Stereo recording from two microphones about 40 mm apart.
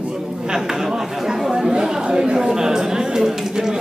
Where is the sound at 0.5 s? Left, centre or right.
Centre.